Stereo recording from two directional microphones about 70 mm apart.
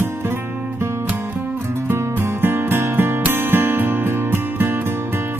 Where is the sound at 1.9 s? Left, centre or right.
Right.